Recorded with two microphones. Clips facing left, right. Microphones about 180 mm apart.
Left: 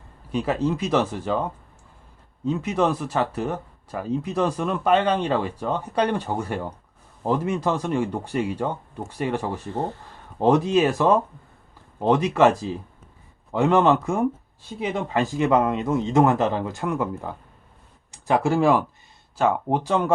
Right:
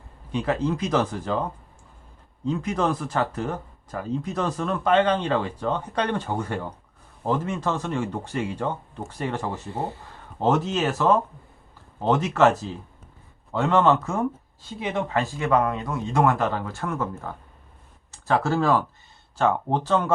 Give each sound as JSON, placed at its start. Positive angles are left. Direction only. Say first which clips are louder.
{"t": 0.4, "sound": "speech", "louder": "even", "side_deg": 10}
{"t": 2.4, "sound": "speech", "louder": "left 2 dB", "side_deg": 10}